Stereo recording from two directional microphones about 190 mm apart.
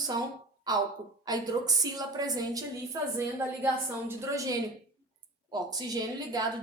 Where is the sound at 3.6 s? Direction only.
15° right (ahead or behind).